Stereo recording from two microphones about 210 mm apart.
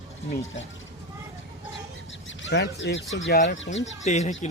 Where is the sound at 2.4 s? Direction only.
55° left (ahead or behind).